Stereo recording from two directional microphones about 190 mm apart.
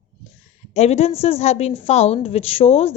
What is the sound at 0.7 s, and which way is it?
A woman's voice, 35° left (ahead or behind).